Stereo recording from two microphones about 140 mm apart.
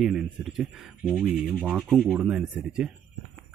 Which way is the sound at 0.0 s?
Centre (ahead or behind).